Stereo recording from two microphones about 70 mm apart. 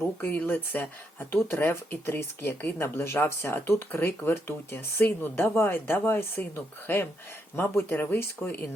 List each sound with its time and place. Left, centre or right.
0.2 s speech: left